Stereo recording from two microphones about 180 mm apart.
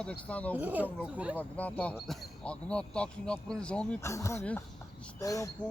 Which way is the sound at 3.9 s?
15° left (ahead or behind).